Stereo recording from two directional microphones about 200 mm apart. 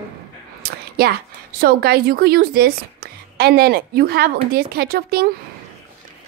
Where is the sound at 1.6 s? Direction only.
50° right (ahead or behind).